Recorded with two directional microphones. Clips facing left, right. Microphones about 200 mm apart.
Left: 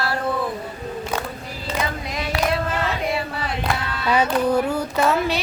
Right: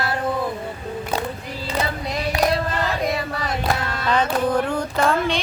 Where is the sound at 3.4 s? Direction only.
45° right (ahead or behind).